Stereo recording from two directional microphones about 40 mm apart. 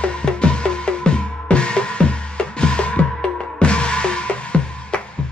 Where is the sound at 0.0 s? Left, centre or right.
Left.